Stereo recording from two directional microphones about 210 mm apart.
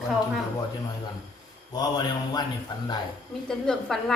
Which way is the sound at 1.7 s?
20° left (ahead or behind).